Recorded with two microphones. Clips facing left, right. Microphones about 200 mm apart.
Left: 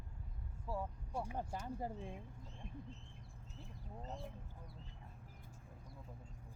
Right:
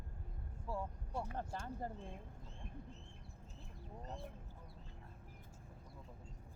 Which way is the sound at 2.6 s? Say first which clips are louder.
Left 2 dB; 55° right (ahead or behind).